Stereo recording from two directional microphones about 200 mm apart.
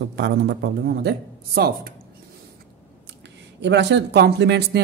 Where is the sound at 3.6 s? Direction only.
60° right (ahead or behind).